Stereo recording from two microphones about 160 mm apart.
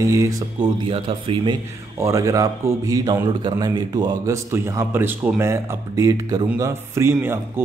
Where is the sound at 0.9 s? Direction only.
35° right (ahead or behind).